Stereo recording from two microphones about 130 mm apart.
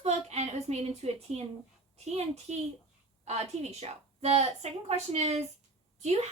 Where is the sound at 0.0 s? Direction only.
60° right (ahead or behind).